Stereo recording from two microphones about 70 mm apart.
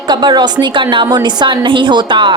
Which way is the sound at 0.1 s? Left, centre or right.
Right.